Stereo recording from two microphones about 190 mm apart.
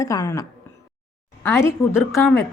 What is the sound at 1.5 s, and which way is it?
Speech, 15° left (ahead or behind).